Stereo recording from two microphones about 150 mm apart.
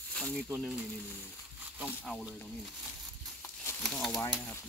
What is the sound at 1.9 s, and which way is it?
Speech, 10° left (ahead or behind).